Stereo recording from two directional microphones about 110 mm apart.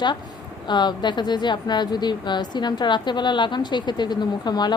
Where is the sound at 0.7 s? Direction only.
40° left (ahead or behind).